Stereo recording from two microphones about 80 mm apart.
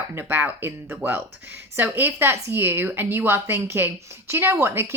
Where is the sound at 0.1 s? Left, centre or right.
Right.